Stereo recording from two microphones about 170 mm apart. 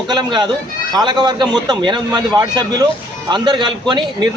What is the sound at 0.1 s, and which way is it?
A man's voice, 25° right (ahead or behind).